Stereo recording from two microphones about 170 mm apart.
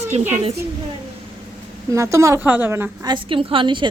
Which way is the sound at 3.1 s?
30° right (ahead or behind).